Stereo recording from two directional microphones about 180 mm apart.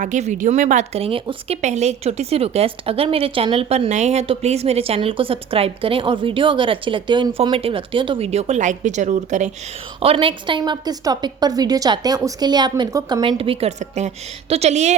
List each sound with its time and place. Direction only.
0.0 s a woman's voice: 40° right (ahead or behind)
10.0 s a woman's voice: 30° right (ahead or behind)
13.2 s a woman's voice: 30° right (ahead or behind)